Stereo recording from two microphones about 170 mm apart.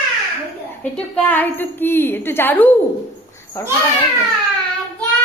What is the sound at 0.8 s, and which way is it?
A woman's voice, 10° left (ahead or behind).